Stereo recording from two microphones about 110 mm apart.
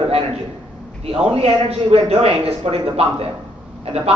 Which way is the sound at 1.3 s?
70° right (ahead or behind).